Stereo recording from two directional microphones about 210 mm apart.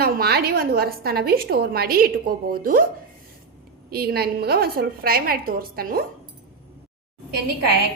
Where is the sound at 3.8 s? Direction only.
45° right (ahead or behind).